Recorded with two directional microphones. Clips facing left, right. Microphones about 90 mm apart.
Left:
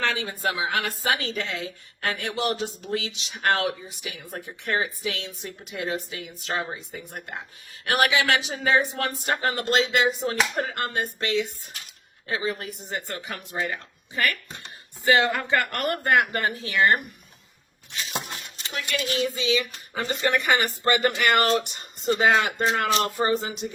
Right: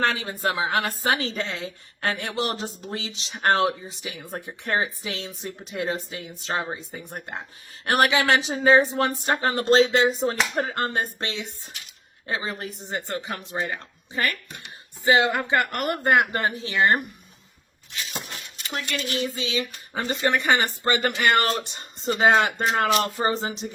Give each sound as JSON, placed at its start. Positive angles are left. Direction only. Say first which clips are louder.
{"t": 0.0, "sound": "a woman's voice", "louder": "right 2 dB", "side_deg": -35}
{"t": 19.4, "sound": "a woman's voice", "louder": "left 3 dB", "side_deg": -35}